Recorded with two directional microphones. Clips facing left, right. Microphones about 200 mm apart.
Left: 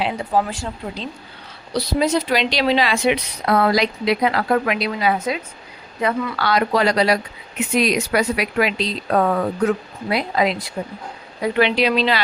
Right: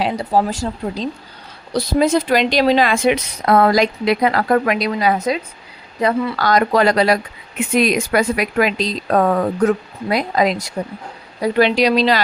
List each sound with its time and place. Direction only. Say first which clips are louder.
0.0 s speech: right 3 dB; 40° right (ahead or behind)
1.7 s speech: right 3 dB; 50° right (ahead or behind)